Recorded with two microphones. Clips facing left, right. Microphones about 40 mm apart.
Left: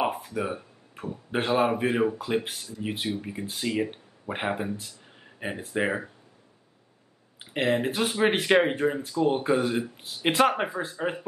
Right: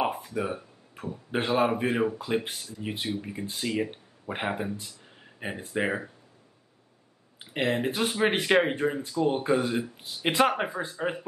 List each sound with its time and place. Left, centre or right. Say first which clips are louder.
0.0 s speech: left 1 dB; centre
7.3 s speech: left 2 dB; centre